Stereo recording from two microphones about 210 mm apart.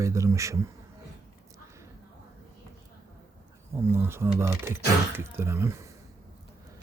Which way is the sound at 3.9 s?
10° right (ahead or behind).